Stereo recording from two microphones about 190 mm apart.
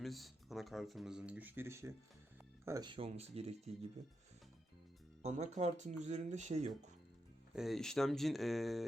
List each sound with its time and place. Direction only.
0.0 s speech: centre (ahead or behind); by 3.8 s 30° right (ahead or behind)
5.2 s speech: 35° right (ahead or behind)
7.5 s speech: centre (ahead or behind)